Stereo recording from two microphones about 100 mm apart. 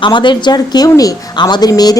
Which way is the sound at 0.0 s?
50° left (ahead or behind).